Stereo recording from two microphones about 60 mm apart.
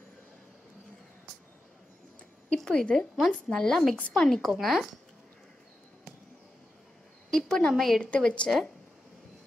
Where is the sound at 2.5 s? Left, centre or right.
Centre.